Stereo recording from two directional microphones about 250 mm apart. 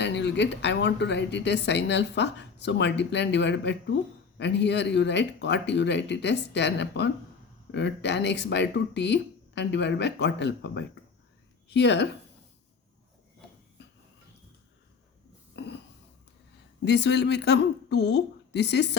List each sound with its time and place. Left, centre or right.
0.0 s speech: left
15.5 s a sound: left
16.8 s speech: left